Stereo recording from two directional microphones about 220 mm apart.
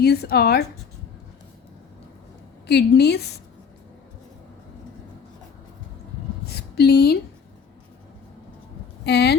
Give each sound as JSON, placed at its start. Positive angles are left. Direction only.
{"t": 0.0, "sound": "a woman's voice", "side_deg": 45}
{"t": 2.6, "sound": "a woman's voice", "side_deg": 50}
{"t": 6.5, "sound": "a sound", "side_deg": 50}
{"t": 9.0, "sound": "speech", "side_deg": 50}